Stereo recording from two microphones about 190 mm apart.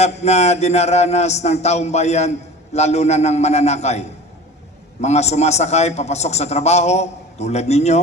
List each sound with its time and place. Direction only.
0.0 s a man's voice: 35° left (ahead or behind)